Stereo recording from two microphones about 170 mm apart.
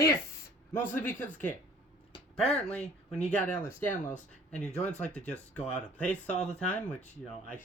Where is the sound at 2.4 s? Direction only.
40° left (ahead or behind).